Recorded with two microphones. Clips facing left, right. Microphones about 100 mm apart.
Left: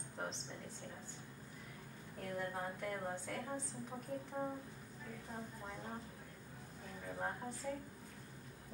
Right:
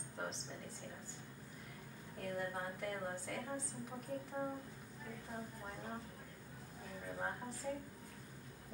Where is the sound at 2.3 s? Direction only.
Centre (ahead or behind).